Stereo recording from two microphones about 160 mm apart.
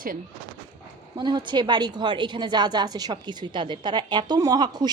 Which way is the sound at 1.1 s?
30° right (ahead or behind).